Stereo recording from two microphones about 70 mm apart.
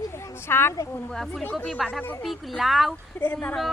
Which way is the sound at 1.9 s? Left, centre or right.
Left.